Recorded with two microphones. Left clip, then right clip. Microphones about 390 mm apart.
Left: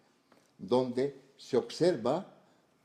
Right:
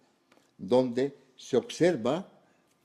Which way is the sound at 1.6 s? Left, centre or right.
Right.